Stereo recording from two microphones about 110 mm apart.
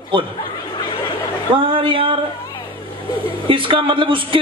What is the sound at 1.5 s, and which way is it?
Speech, 50° right (ahead or behind).